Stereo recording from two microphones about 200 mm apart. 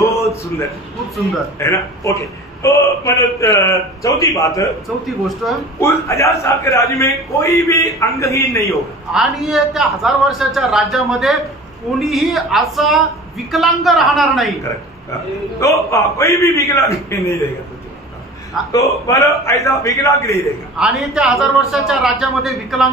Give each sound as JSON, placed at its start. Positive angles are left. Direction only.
{"t": 0.0, "sound": "a sound", "side_deg": 15}
{"t": 1.6, "sound": "a man's voice", "side_deg": 15}
{"t": 5.4, "sound": "a man's voice", "side_deg": 0}
{"t": 5.8, "sound": "a man's voice", "side_deg": 15}
{"t": 9.1, "sound": "a man's voice", "side_deg": 0}
{"t": 15.6, "sound": "a man's voice", "side_deg": 15}
{"t": 18.6, "sound": "a man's voice", "side_deg": 0}
{"t": 19.0, "sound": "a man's voice", "side_deg": 15}
{"t": 20.7, "sound": "a man's voice", "side_deg": 0}